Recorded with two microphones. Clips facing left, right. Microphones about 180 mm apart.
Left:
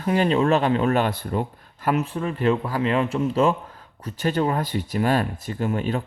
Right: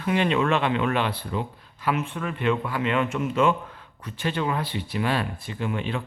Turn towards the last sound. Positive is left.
turn(degrees=40)  # may be behind; listen again after turning